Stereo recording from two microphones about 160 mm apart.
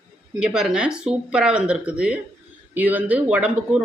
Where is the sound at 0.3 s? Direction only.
5° right (ahead or behind).